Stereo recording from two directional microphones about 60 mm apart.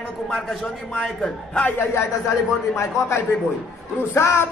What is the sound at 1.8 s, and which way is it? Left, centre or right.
A man's voice, left.